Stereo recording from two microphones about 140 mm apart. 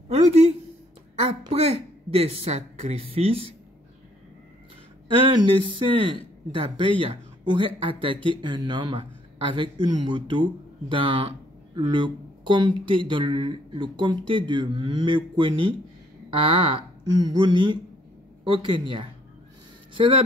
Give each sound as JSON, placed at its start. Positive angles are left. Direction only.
{"t": 0.1, "sound": "speech", "side_deg": -50}
{"t": 1.5, "sound": "speech", "side_deg": -45}
{"t": 5.3, "sound": "speech", "side_deg": -35}